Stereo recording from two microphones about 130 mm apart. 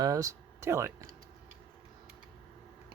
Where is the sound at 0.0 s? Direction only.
25° right (ahead or behind).